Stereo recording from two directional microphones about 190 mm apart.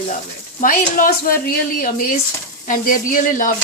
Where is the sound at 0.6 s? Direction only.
45° left (ahead or behind).